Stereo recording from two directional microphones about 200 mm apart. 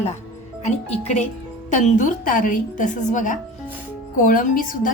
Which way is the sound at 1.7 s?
40° left (ahead or behind).